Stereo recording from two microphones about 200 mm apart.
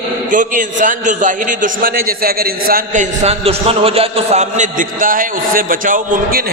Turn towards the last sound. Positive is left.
turn(degrees=-45)  # may be behind; listen again after turning